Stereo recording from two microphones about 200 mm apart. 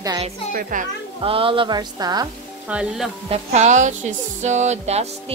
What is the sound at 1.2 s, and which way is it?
Music, 25° right (ahead or behind).